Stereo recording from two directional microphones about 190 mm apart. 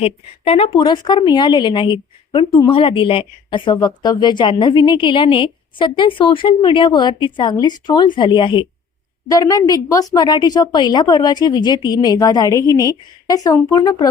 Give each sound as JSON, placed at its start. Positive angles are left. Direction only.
{"t": 0.0, "sound": "a woman's voice", "side_deg": 30}